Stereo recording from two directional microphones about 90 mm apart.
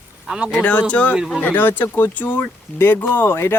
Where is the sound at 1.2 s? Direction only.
5° right (ahead or behind).